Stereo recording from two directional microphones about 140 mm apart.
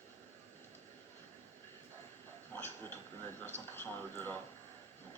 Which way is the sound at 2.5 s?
15° left (ahead or behind).